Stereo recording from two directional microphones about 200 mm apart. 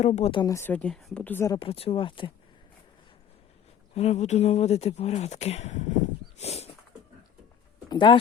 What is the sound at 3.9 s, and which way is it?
Speech, 30° left (ahead or behind).